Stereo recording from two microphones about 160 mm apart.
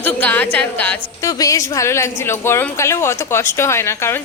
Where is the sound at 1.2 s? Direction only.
20° left (ahead or behind).